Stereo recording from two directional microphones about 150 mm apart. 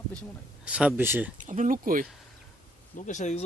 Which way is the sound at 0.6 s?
10° right (ahead or behind).